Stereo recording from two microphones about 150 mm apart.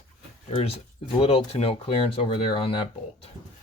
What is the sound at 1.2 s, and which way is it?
Speech, 40° left (ahead or behind).